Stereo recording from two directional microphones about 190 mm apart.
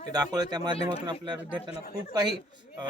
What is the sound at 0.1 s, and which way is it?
A man's voice, 20° right (ahead or behind).